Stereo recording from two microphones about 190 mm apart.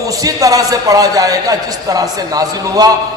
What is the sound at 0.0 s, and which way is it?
A man's voice, 20° right (ahead or behind).